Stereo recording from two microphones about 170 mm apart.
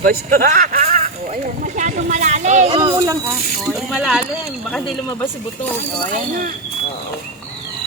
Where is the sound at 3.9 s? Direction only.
5° right (ahead or behind).